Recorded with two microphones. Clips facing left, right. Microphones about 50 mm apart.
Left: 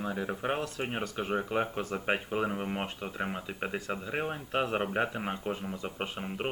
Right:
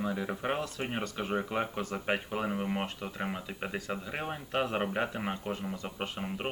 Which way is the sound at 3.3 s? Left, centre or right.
Centre.